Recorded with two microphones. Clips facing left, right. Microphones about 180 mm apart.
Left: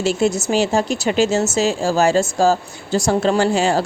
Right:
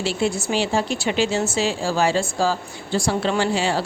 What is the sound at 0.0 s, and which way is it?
Speech, 45° left (ahead or behind).